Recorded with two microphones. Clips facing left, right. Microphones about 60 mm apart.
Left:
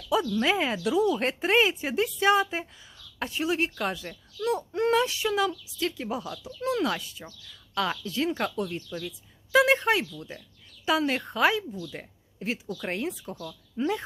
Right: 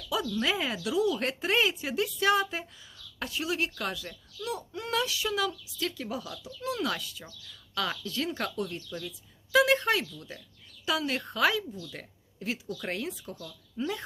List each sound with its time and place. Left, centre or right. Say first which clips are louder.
0.3 s a woman's voice: left 4 dB; left
6.6 s speech: left 5 dB; left
6.8 s a woman's voice: left 3 dB; left